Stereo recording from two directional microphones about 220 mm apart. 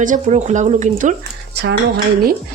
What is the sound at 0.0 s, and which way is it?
Speech, 35° right (ahead or behind).